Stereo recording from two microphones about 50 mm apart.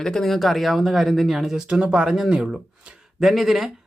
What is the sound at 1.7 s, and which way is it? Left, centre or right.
Speech, centre.